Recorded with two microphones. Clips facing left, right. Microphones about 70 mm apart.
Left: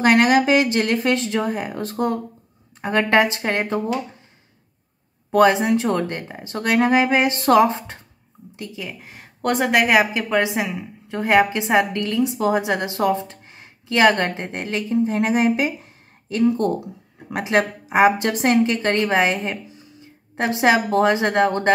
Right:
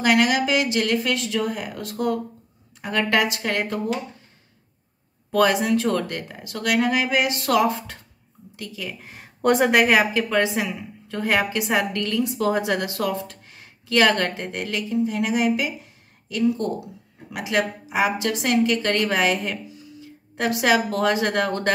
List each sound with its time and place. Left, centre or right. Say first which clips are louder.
0.0 s a woman's voice: left 4 dB; left
5.3 s a woman's voice: left 4 dB; left
9.0 s a woman's voice: right 3 dB; centre; by 21.7 s left